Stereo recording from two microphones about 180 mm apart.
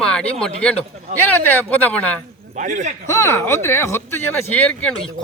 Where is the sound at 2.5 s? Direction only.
45° right (ahead or behind).